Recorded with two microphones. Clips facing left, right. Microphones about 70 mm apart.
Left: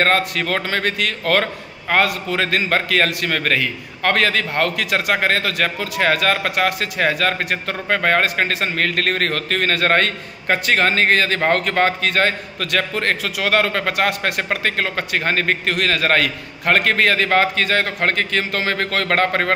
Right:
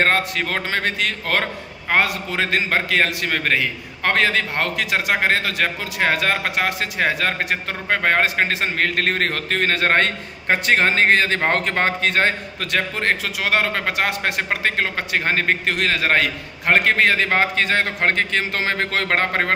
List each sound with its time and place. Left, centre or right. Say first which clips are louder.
0.0 s a man's voice: left 1 dB; centre